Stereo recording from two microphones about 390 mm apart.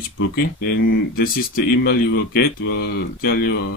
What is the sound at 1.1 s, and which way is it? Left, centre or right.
Speech, left.